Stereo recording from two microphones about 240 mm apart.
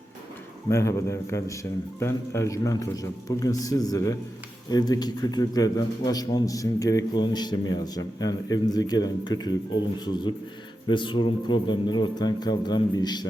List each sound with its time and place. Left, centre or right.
0.7 s a man's voice: centre